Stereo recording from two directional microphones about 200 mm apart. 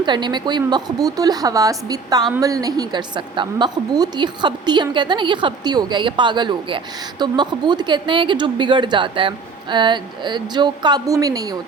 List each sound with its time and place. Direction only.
0.0 s a woman's voice: 20° right (ahead or behind)